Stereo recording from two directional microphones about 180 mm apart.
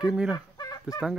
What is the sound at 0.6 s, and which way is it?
Fowl, 20° left (ahead or behind).